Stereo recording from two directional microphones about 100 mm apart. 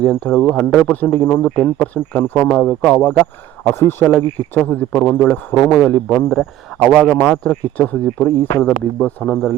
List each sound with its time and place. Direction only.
0.0 s speech: 15° left (ahead or behind)
0.5 s speech: centre (ahead or behind)
0.9 s speech: 20° left (ahead or behind)
6.7 s speech: centre (ahead or behind)
7.1 s speech: 15° left (ahead or behind)
8.2 s speech: 30° left (ahead or behind)
8.6 s speech: 15° left (ahead or behind)